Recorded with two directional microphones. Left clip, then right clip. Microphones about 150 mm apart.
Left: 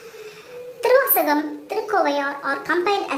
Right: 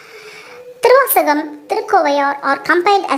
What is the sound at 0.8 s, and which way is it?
A child's voice, 45° right (ahead or behind).